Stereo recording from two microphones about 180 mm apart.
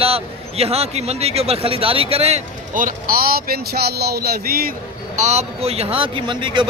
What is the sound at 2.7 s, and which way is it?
Speech, 50° right (ahead or behind).